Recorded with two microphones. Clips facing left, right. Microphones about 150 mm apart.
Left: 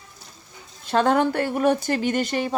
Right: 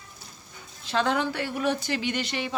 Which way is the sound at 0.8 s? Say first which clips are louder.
Left 6 dB; 50° left (ahead or behind).